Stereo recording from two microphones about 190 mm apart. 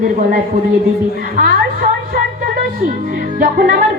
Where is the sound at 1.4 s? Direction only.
45° right (ahead or behind).